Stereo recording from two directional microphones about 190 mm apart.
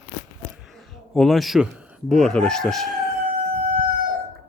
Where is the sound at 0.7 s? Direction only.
Centre (ahead or behind).